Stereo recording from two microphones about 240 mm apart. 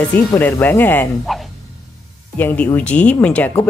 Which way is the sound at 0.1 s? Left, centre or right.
Centre.